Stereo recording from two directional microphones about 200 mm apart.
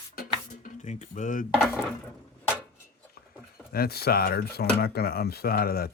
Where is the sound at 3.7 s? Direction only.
50° left (ahead or behind).